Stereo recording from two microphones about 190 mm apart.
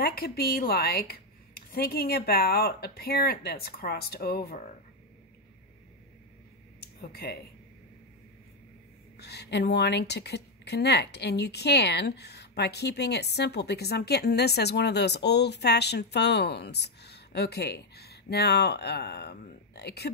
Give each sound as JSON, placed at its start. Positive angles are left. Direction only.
{"t": 0.0, "sound": "a woman's voice", "side_deg": 55}
{"t": 6.8, "sound": "a sound", "side_deg": 55}
{"t": 9.1, "sound": "a woman's voice", "side_deg": 60}